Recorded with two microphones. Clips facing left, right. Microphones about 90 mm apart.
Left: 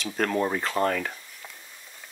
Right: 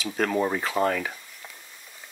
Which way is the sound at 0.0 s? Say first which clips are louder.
Right 1 dB; centre (ahead or behind).